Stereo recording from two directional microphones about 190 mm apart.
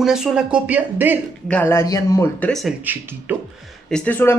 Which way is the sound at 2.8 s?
10° right (ahead or behind).